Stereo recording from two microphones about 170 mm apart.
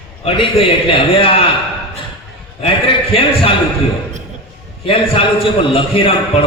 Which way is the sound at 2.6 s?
35° left (ahead or behind).